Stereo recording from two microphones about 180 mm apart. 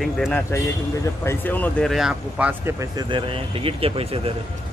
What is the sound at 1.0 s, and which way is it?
Speech, 15° left (ahead or behind).